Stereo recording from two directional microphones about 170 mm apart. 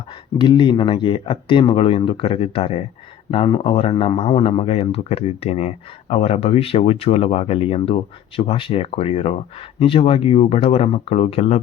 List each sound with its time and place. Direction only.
0.3 s speech: 25° left (ahead or behind)